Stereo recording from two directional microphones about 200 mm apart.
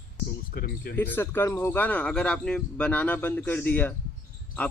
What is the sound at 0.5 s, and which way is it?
Speech, 50° left (ahead or behind).